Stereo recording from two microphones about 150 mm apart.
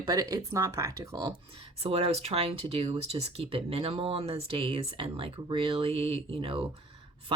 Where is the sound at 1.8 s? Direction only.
40° right (ahead or behind).